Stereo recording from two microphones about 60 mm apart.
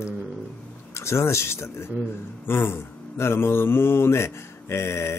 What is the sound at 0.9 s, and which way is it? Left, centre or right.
Speech, left.